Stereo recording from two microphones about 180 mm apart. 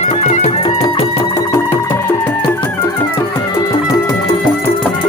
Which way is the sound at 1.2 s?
15° left (ahead or behind).